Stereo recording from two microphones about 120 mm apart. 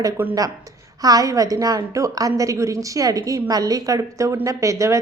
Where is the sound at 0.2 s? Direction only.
15° right (ahead or behind).